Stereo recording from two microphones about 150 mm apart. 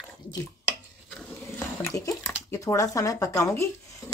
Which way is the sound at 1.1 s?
10° left (ahead or behind).